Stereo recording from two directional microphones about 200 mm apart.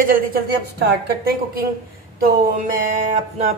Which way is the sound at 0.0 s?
45° right (ahead or behind).